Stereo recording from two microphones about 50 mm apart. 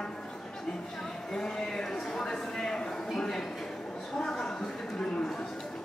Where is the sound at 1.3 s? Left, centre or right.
Centre.